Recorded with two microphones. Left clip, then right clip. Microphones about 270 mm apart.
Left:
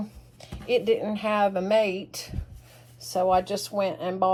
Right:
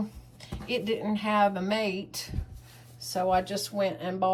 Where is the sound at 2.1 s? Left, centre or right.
Centre.